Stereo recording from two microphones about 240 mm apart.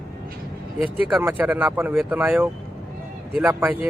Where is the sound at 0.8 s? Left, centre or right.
Centre.